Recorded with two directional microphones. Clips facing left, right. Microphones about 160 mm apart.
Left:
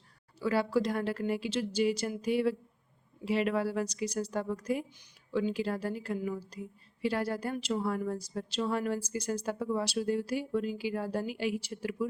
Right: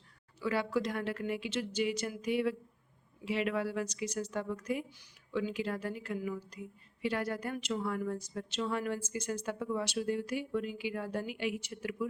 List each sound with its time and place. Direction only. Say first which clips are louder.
0.3 s a woman's voice: left 4 dB; 35° left (ahead or behind)